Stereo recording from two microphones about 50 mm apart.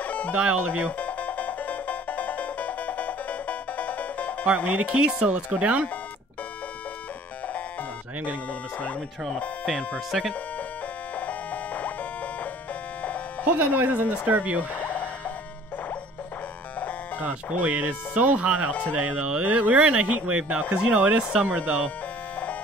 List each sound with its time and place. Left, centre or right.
0.0 s music: left
0.4 s speech: right
0.8 s music: left
4.6 s speech: right
4.9 s speech: right
10.1 s speech: centre
11.1 s music: left
13.6 s speech: right
14.8 s a sound: left
17.6 s speech: right
18.7 s speech: left
18.9 s speech: right